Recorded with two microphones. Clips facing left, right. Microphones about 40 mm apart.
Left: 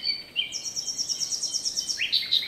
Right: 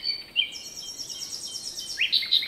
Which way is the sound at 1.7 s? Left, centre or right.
Right.